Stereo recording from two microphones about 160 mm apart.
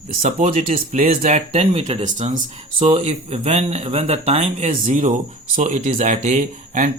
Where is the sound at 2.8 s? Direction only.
35° right (ahead or behind).